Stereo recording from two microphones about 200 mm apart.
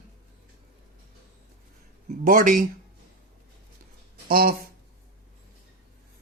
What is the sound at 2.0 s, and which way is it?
Speech, 40° right (ahead or behind).